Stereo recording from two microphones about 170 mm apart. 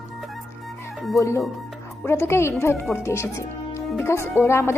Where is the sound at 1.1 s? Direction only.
20° left (ahead or behind).